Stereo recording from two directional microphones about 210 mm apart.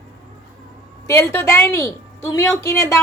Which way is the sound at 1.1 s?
15° left (ahead or behind).